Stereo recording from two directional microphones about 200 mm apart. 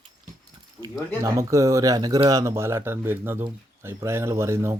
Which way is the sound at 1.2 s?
15° right (ahead or behind).